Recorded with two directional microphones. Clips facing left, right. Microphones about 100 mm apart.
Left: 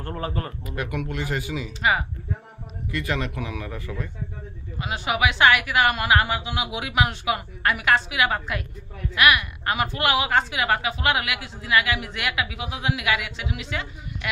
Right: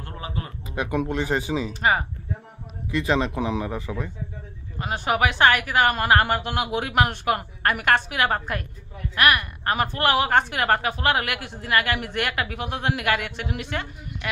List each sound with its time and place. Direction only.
0.0 s a man's voice: 45° left (ahead or behind)
0.7 s speech: 25° right (ahead or behind)
2.9 s speech: 25° right (ahead or behind)
4.7 s a woman's voice: 45° right (ahead or behind)
6.2 s a woman's voice: 55° right (ahead or behind)
14.2 s speech: 35° right (ahead or behind)